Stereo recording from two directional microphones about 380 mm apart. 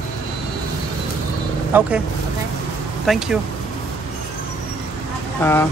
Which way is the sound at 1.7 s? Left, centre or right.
Centre.